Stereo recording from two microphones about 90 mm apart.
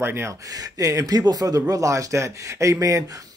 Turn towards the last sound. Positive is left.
turn(degrees=-40)  # may be behind; listen again after turning